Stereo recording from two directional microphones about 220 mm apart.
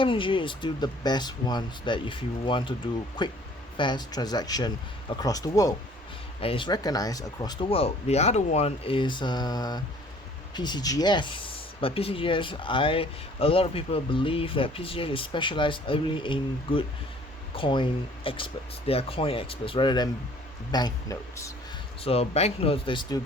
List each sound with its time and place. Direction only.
0.0 s speech: 25° left (ahead or behind)
22.0 s speech: 25° left (ahead or behind)